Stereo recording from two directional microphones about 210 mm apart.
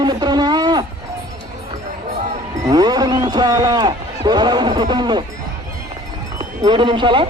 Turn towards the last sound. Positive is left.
turn(degrees=-20)  # may be behind; listen again after turning